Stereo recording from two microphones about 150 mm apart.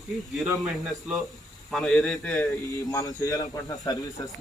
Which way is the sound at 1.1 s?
5° right (ahead or behind).